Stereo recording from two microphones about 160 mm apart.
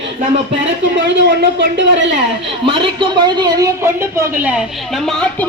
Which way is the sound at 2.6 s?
30° right (ahead or behind).